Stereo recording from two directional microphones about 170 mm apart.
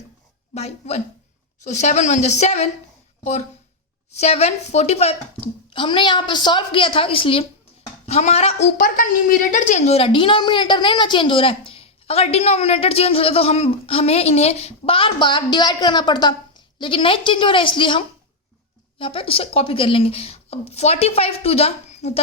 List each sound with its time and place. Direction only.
0.5 s a woman's voice: 40° left (ahead or behind)
4.2 s a woman's voice: 40° left (ahead or behind)